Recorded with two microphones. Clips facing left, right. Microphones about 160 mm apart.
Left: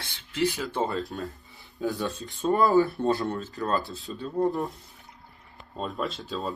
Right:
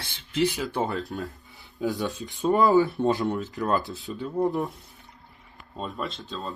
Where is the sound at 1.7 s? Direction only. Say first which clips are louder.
Right 1 dB; 20° right (ahead or behind).